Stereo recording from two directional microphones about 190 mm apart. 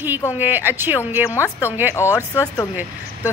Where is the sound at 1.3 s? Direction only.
15° left (ahead or behind).